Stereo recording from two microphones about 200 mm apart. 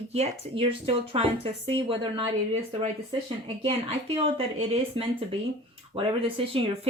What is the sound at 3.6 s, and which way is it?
Speech, 25° right (ahead or behind).